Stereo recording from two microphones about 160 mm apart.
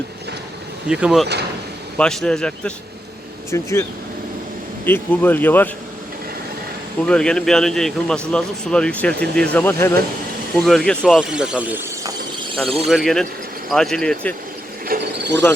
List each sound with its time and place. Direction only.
0.9 s speech: 5° right (ahead or behind)
3.5 s speech: 20° left (ahead or behind)
4.9 s speech: 10° left (ahead or behind)
7.0 s speech: 5° left (ahead or behind)
10.6 s speech: 5° left (ahead or behind)
14.8 s speech: 90° right